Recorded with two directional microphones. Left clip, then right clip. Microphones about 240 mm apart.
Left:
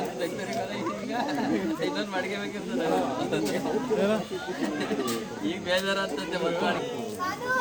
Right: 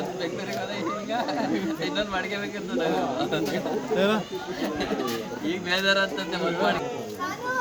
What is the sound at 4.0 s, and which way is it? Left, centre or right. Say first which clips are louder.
Speech: right 4 dB; right.